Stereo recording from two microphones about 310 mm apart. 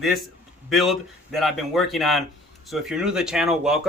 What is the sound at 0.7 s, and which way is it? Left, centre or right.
Speech, centre.